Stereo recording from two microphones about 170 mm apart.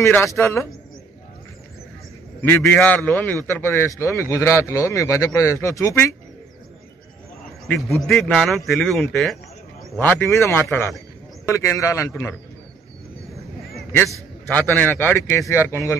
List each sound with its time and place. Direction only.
0.0 s a man's voice: 15° left (ahead or behind)
2.4 s a man's voice: 15° left (ahead or behind)
8.1 s speech: centre (ahead or behind)
9.9 s a man's voice: 15° left (ahead or behind)
14.5 s a man's voice: 10° left (ahead or behind)